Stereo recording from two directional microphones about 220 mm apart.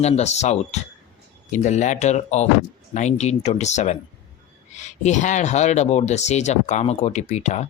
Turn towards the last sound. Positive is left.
turn(degrees=30)  # may be behind; listen again after turning